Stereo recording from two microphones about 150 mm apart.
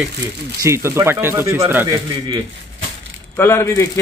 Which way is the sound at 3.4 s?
15° left (ahead or behind).